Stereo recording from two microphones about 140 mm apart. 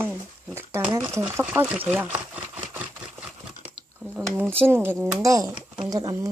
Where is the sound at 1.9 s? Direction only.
10° right (ahead or behind).